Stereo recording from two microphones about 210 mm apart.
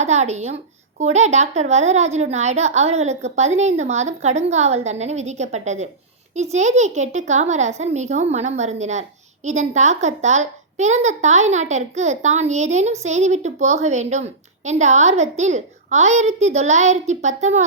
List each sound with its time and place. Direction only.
0.0 s speech: 30° right (ahead or behind)